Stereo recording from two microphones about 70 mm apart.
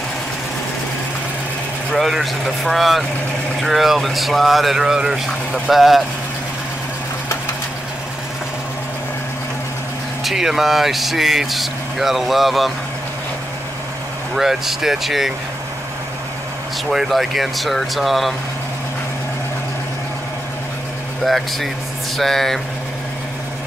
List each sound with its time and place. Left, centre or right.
1.9 s speech: centre
10.2 s speech: centre
14.3 s speech: centre
16.9 s speech: centre
21.2 s speech: centre